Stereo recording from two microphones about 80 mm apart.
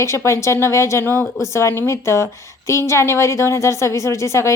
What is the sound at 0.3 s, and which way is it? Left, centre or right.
A woman's voice, left.